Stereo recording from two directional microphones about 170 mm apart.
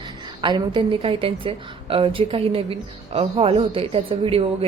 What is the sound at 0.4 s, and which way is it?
A woman's voice, 25° right (ahead or behind).